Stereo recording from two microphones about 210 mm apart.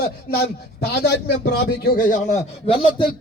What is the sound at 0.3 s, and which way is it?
A man's voice, 50° left (ahead or behind).